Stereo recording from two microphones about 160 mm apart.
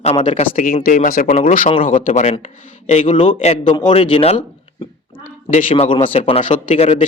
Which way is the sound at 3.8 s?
30° left (ahead or behind).